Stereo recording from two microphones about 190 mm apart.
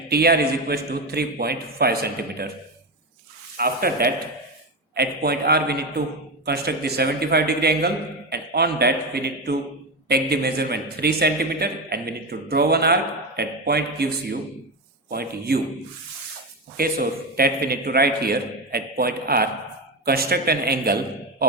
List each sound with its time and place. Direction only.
0.1 s a man's voice: 55° right (ahead or behind)
3.6 s a man's voice: 55° right (ahead or behind)
16.7 s a man's voice: 50° right (ahead or behind)